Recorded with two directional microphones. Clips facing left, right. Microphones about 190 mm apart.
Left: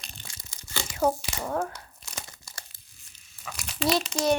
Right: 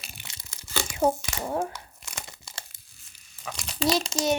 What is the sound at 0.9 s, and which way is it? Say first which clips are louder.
Speech: right 1 dB; 20° right (ahead or behind).